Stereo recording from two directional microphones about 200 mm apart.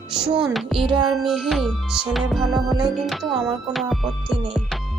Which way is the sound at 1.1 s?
Centre (ahead or behind).